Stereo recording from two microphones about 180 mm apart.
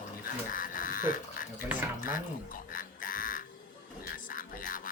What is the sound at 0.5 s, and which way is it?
Speech, 50° left (ahead or behind).